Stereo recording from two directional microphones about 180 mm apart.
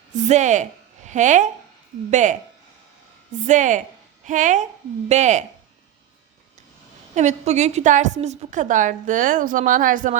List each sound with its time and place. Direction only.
0.1 s a woman's voice: 40° right (ahead or behind)
3.4 s a woman's voice: 45° right (ahead or behind)
7.2 s a woman's voice: 40° right (ahead or behind)